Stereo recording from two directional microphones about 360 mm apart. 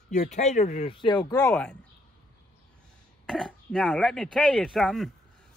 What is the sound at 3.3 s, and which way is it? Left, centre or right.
Speech, centre.